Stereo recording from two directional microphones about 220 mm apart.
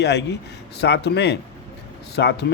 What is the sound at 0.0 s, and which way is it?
Speech, 50° left (ahead or behind).